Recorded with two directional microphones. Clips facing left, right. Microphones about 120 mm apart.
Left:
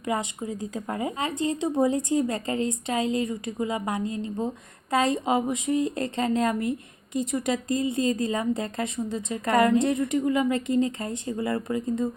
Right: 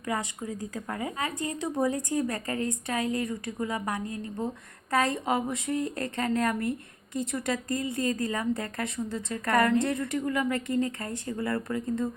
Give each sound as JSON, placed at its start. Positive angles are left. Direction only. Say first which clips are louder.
{"t": 0.0, "sound": "a woman's voice", "louder": "left 3 dB", "side_deg": 20}